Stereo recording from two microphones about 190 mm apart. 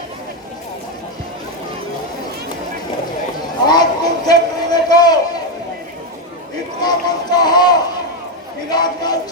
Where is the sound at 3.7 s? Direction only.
20° left (ahead or behind).